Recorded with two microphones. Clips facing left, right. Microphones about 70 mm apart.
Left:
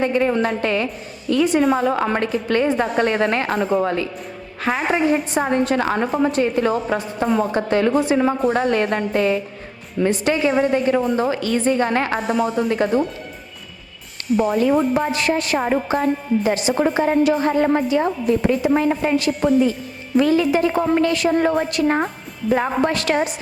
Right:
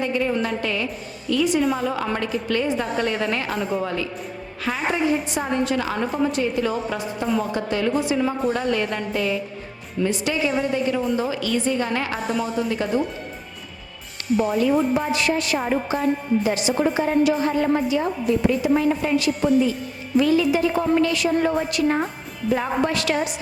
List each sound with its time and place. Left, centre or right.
0.0 s a woman's voice: left
14.3 s a woman's voice: left